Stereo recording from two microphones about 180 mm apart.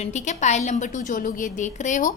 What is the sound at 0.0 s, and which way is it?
A woman's voice, 40° left (ahead or behind).